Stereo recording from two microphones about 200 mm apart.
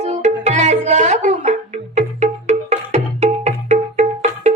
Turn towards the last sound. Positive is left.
turn(degrees=-35)  # may be behind; listen again after turning